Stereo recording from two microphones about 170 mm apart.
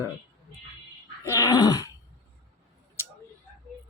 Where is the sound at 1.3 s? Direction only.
20° left (ahead or behind).